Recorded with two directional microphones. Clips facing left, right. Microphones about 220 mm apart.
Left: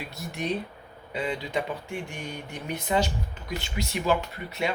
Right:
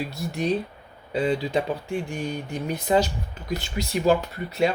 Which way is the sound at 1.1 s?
35° right (ahead or behind).